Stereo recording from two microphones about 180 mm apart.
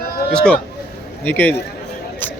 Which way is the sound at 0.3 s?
5° left (ahead or behind).